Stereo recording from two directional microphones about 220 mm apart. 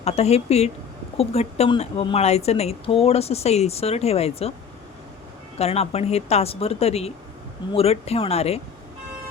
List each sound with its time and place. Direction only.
0.0 s a woman's voice: 30° left (ahead or behind)
5.5 s a woman's voice: 30° left (ahead or behind)